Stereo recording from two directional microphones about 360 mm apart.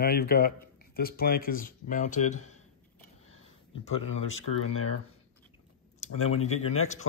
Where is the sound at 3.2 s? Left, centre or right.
Left.